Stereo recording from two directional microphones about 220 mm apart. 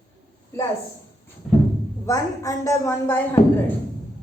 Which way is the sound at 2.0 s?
15° left (ahead or behind).